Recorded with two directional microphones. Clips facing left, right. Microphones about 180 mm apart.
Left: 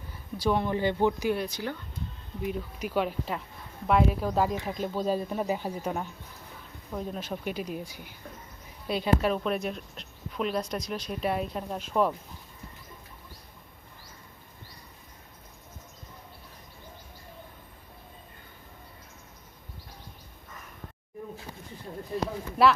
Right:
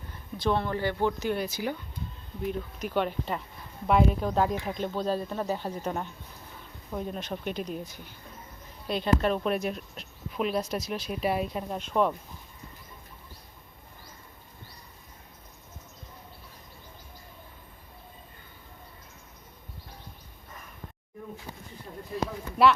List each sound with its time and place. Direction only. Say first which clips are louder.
0.3 s speech: left 1 dB; 10° left (ahead or behind)
1.3 s speech: even; 5° right (ahead or behind)
2.4 s speech: even; 5° left (ahead or behind)
22.1 s speech: left 1 dB; centre (ahead or behind)